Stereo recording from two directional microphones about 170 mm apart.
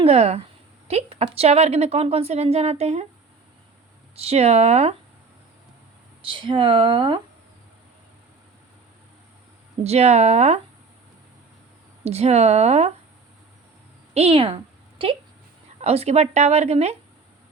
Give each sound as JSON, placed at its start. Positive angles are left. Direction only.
{"t": 0.0, "sound": "a woman's voice", "side_deg": -40}
{"t": 4.1, "sound": "a woman's voice", "side_deg": -35}
{"t": 6.2, "sound": "a woman's voice", "side_deg": -30}
{"t": 9.8, "sound": "a woman's voice", "side_deg": -40}
{"t": 12.0, "sound": "a woman's voice", "side_deg": -40}
{"t": 14.1, "sound": "a sound", "side_deg": -35}
{"t": 15.8, "sound": "a woman's voice", "side_deg": -35}